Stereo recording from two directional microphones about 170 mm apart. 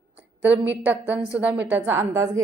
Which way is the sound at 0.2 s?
10° right (ahead or behind).